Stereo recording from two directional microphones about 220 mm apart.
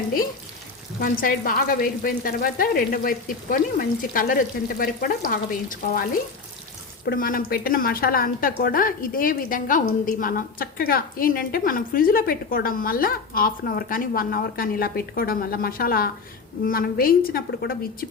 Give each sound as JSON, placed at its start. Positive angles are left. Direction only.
{"t": 1.0, "sound": "a woman's voice", "side_deg": 40}
{"t": 7.0, "sound": "a woman's voice", "side_deg": 45}